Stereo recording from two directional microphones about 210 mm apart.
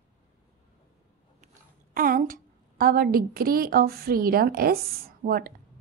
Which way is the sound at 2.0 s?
40° right (ahead or behind).